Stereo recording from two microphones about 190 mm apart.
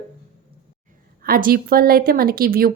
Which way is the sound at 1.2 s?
50° right (ahead or behind).